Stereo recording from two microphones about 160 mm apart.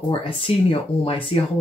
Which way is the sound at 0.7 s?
35° left (ahead or behind).